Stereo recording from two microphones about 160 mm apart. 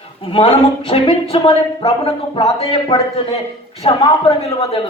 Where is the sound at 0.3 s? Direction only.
35° left (ahead or behind).